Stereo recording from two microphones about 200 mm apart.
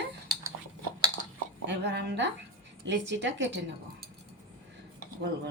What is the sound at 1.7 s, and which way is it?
Speech, 60° right (ahead or behind).